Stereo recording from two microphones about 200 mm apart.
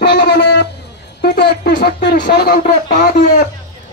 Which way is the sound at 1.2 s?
55° left (ahead or behind).